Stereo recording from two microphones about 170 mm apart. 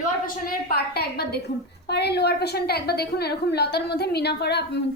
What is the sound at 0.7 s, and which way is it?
A woman's voice, 70° left (ahead or behind).